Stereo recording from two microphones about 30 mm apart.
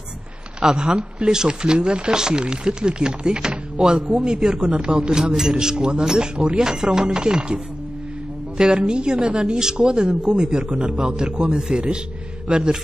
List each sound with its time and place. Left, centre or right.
0.6 s a man's voice: right
5.5 s speech: right
6.6 s a man's voice: centre